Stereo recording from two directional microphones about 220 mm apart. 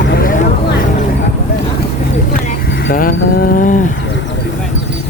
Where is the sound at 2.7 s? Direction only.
50° left (ahead or behind).